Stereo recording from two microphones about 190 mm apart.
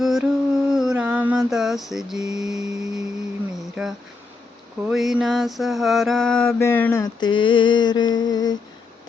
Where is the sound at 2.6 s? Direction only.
20° right (ahead or behind).